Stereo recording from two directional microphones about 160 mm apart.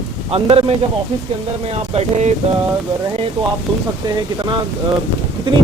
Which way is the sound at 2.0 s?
45° right (ahead or behind).